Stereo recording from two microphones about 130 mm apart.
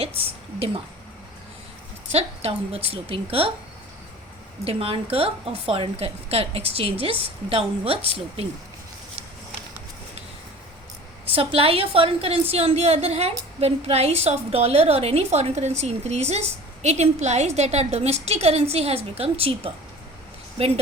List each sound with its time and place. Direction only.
0.2 s a woman's voice: 45° right (ahead or behind)
2.1 s a woman's voice: 50° right (ahead or behind)
4.6 s a woman's voice: 45° right (ahead or behind)
11.3 s a woman's voice: 45° right (ahead or behind)